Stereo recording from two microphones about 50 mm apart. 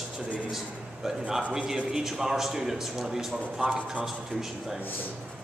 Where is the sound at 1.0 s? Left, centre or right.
Centre.